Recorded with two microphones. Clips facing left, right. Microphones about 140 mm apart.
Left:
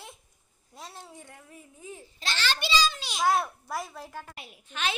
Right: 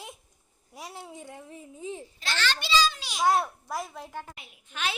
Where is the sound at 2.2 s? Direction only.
25° left (ahead or behind).